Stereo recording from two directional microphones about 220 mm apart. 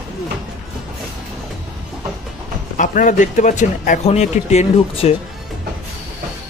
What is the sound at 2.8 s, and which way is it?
A man's voice, 35° left (ahead or behind).